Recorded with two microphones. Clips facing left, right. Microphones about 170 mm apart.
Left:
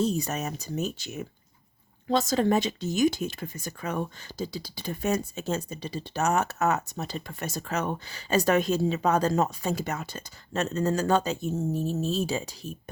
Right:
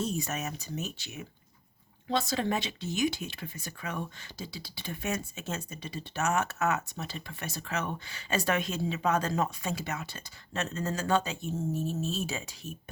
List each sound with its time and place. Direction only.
0.0 s speech: 35° left (ahead or behind)